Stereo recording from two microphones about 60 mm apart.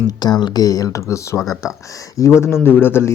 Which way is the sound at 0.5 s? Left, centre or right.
Left.